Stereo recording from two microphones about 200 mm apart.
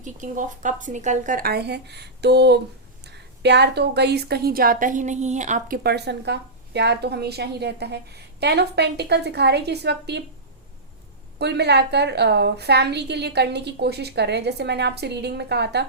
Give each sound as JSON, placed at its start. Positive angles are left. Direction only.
{"t": 0.0, "sound": "a woman's voice", "side_deg": -40}
{"t": 11.3, "sound": "a woman's voice", "side_deg": -55}